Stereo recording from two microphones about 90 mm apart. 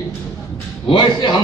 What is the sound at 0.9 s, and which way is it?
Speech, 55° left (ahead or behind).